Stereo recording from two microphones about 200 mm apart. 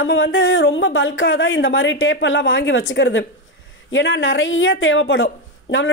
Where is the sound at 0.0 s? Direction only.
70° left (ahead or behind).